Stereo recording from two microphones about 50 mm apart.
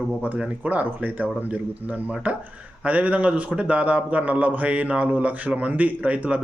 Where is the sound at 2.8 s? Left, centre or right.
Right.